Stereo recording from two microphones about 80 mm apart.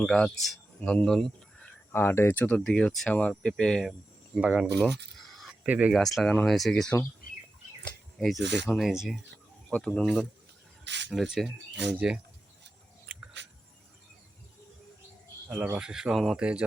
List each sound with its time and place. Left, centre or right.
0.0 s speech: centre
1.9 s speech: left
2.6 s speech: centre
4.4 s speech: centre
5.9 s speech: centre
9.7 s speech: centre
11.1 s speech: centre
15.4 s speech: right
15.8 s speech: centre
16.4 s speech: centre